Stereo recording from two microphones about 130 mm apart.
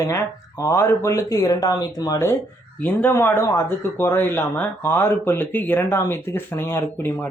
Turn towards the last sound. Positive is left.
turn(degrees=15)  # may be behind; listen again after turning